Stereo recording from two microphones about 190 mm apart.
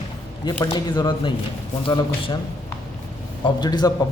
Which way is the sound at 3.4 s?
20° left (ahead or behind).